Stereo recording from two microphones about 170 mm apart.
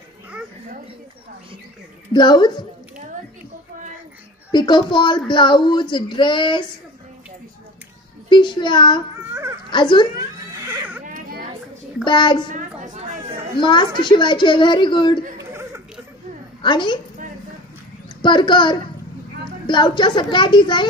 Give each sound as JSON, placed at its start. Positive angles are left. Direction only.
{"t": 2.1, "sound": "speech", "side_deg": 25}
{"t": 4.5, "sound": "speech", "side_deg": 25}
{"t": 8.3, "sound": "speech", "side_deg": 25}
{"t": 9.3, "sound": "dog", "side_deg": -15}
{"t": 9.7, "sound": "speech", "side_deg": 30}
{"t": 11.1, "sound": "children playing", "side_deg": -60}
{"t": 12.0, "sound": "speech", "side_deg": 25}
{"t": 12.5, "sound": "chatter", "side_deg": -50}
{"t": 13.6, "sound": "speech", "side_deg": 25}
{"t": 15.3, "sound": "a sound", "side_deg": -15}
{"t": 16.6, "sound": "speech", "side_deg": 25}
{"t": 18.2, "sound": "speech", "side_deg": 25}